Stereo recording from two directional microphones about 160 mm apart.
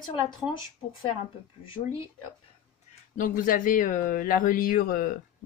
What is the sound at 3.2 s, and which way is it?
Speech, 60° left (ahead or behind).